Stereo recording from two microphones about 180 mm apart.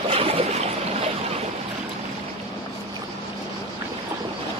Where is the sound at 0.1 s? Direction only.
30° right (ahead or behind).